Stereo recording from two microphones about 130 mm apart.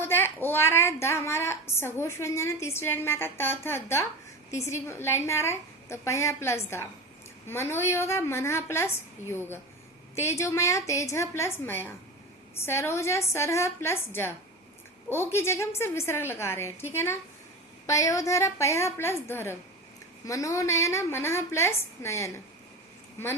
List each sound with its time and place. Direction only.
0.0 s a woman's voice: 15° left (ahead or behind)